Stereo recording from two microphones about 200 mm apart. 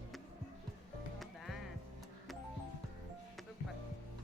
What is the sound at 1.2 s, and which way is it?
Music, centre (ahead or behind).